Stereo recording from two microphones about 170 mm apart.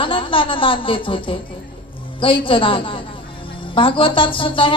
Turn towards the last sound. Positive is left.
turn(degrees=30)  # may be behind; listen again after turning